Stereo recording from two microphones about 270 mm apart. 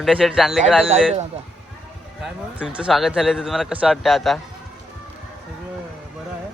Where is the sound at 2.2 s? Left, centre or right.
Centre.